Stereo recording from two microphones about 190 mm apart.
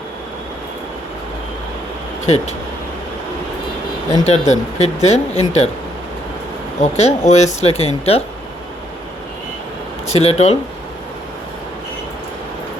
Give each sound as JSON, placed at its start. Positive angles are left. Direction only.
{"t": 2.2, "sound": "speech", "side_deg": 35}
{"t": 4.2, "sound": "speech", "side_deg": 35}
{"t": 6.8, "sound": "speech", "side_deg": 35}
{"t": 10.1, "sound": "speech", "side_deg": 35}